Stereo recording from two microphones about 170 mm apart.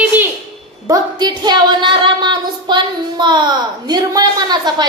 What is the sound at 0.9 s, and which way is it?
Speech, 25° right (ahead or behind).